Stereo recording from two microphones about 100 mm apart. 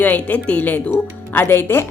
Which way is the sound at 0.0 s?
15° left (ahead or behind).